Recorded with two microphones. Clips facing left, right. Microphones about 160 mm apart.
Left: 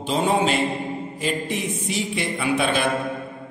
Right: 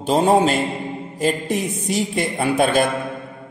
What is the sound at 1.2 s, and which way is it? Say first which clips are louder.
A man's voice: right 6 dB; 45° right (ahead or behind).